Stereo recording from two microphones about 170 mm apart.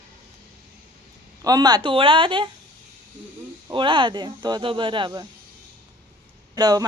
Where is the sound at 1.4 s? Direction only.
20° right (ahead or behind).